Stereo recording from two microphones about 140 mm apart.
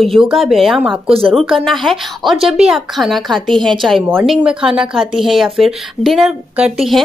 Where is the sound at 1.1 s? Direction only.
40° right (ahead or behind).